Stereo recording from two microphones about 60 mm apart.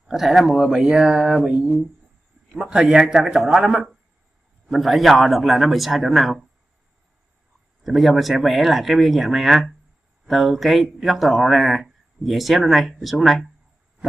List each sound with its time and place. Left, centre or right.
0.0 s speech: centre; by 1.8 s right
2.9 s speech: centre
7.8 s speech: centre